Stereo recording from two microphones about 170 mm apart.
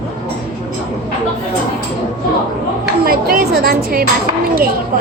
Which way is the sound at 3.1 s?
60° right (ahead or behind).